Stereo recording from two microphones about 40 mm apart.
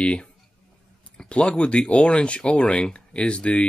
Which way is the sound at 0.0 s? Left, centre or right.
Left.